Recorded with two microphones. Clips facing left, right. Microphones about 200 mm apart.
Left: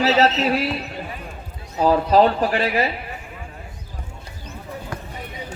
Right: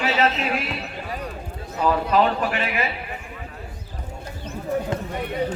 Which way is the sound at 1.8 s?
35° left (ahead or behind).